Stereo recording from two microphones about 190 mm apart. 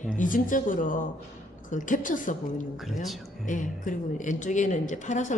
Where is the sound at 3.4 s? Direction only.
40° left (ahead or behind).